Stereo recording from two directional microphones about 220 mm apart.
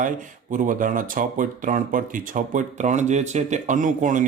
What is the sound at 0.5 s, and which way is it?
Speech, 35° right (ahead or behind).